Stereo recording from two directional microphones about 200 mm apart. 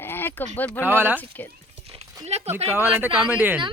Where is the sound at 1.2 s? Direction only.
10° left (ahead or behind).